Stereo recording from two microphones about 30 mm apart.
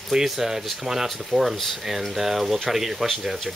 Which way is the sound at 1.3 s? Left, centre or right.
Centre.